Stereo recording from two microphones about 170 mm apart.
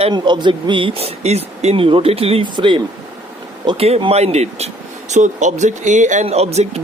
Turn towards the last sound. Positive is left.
turn(degrees=-40)  # may be behind; listen again after turning